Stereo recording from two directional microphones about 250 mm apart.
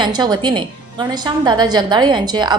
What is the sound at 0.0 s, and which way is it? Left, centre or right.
A woman's voice, centre.